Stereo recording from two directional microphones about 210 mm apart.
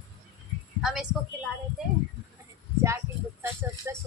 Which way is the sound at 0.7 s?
Centre (ahead or behind).